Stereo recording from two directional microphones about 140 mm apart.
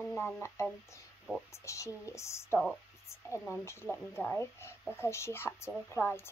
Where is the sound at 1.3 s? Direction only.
10° right (ahead or behind).